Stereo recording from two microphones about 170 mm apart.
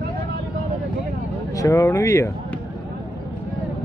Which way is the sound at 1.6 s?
15° left (ahead or behind).